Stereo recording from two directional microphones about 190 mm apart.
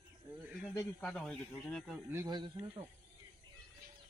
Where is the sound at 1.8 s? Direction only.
10° right (ahead or behind).